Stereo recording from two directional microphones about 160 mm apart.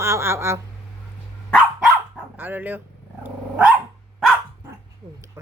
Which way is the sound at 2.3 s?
10° right (ahead or behind).